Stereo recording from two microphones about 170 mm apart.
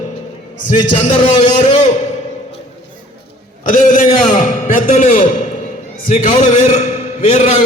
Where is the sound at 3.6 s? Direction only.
50° left (ahead or behind).